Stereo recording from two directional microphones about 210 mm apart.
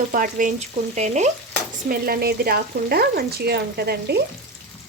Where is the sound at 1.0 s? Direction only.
35° right (ahead or behind).